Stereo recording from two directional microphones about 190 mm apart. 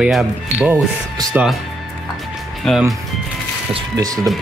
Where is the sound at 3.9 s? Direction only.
20° right (ahead or behind).